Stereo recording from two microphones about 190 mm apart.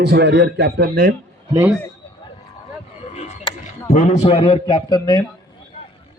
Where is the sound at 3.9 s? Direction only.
45° left (ahead or behind).